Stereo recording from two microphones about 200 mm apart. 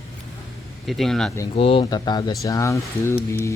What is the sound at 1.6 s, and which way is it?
Speech, 25° left (ahead or behind).